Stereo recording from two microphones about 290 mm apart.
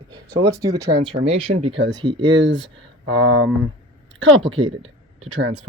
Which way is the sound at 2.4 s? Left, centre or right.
Right.